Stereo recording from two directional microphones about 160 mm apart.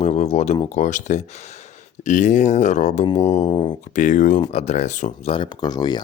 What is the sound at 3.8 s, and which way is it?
Speech, 50° left (ahead or behind).